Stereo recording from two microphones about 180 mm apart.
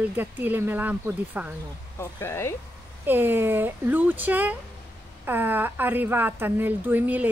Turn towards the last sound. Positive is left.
turn(degrees=-10)  # may be behind; listen again after turning